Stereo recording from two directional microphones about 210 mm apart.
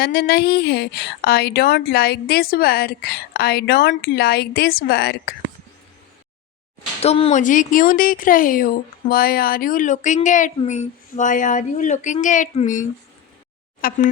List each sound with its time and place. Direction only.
0.0 s a woman's voice: 50° left (ahead or behind)
7.0 s speech: 30° left (ahead or behind)
13.8 s speech: 40° left (ahead or behind)